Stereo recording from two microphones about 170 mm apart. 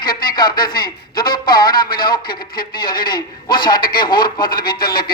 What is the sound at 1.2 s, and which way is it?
Speech, 60° left (ahead or behind).